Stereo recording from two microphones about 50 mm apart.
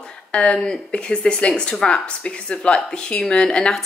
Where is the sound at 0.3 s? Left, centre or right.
Centre.